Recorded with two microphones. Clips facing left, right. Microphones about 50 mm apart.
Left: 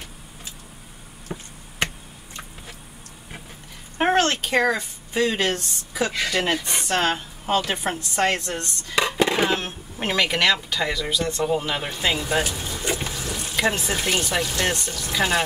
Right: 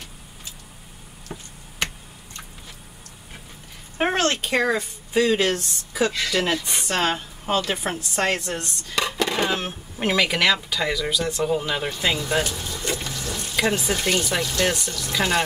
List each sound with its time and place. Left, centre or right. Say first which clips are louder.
1.3 s a sound: left 3 dB; centre
4.0 s speech: left 2 dB; centre
6.0 s speech: even; centre
8.4 s speech: even; centre
8.9 s dishes: left 3 dB; centre
9.6 s speech: right 2 dB; centre
12.3 s water: even; centre
14.9 s speech: left 1 dB; centre